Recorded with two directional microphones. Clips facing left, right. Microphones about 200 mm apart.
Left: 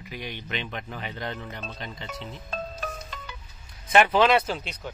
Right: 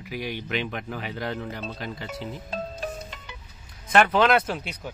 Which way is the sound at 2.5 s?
20° right (ahead or behind).